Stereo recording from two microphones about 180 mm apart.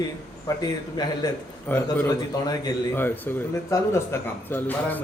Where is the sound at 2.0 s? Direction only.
20° left (ahead or behind).